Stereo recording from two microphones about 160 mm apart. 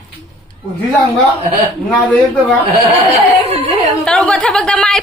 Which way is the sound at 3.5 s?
40° right (ahead or behind).